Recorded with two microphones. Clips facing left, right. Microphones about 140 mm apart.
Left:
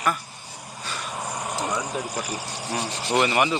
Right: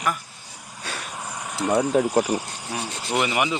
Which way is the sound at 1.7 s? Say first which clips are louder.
Right 9 dB; 55° right (ahead or behind).